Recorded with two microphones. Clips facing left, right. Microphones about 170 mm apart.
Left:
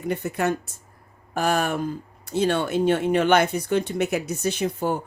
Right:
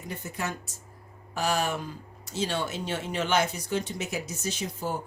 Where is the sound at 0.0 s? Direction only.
65° left (ahead or behind).